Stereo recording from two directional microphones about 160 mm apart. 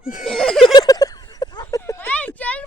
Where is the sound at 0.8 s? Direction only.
25° left (ahead or behind).